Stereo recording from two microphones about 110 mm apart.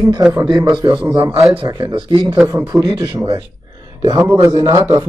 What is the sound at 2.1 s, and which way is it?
Speech, 25° right (ahead or behind).